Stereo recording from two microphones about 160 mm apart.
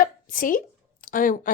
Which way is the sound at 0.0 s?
60° left (ahead or behind).